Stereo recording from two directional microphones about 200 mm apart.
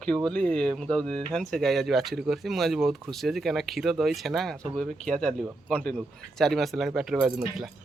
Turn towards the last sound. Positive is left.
turn(degrees=0)  # may be behind; listen again after turning